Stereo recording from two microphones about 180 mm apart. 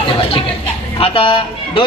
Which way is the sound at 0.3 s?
30° left (ahead or behind).